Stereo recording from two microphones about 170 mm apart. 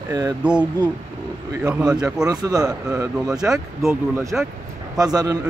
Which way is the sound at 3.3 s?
5° right (ahead or behind).